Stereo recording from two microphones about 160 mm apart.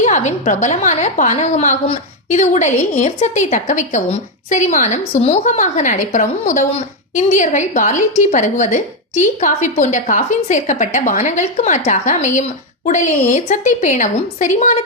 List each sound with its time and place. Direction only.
0.0 s a woman's voice: 50° left (ahead or behind)